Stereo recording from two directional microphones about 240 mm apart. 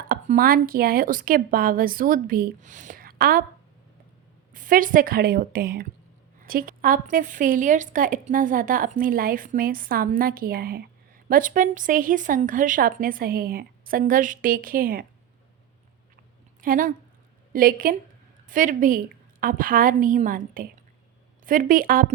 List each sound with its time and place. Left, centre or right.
0.1 s speech: right
4.5 s speech: right
16.6 s speech: right